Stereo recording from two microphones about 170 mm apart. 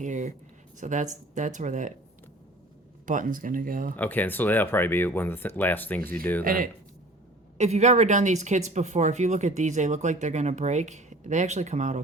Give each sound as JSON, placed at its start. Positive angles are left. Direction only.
{"t": 0.0, "sound": "speech", "side_deg": -45}
{"t": 3.1, "sound": "speech", "side_deg": -50}
{"t": 3.9, "sound": "speech", "side_deg": 10}
{"t": 6.4, "sound": "speech", "side_deg": -55}
{"t": 7.6, "sound": "speech", "side_deg": -40}